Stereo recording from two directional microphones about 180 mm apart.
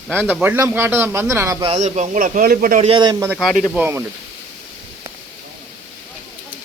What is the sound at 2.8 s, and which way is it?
Speech, 25° right (ahead or behind).